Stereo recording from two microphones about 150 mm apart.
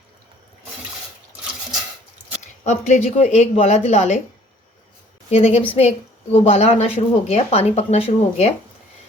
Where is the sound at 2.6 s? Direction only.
50° left (ahead or behind).